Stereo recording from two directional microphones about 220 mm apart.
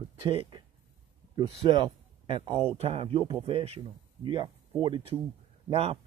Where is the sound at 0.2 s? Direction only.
25° right (ahead or behind).